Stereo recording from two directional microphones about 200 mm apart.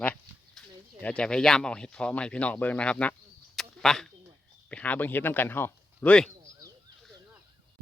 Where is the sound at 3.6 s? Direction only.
Centre (ahead or behind).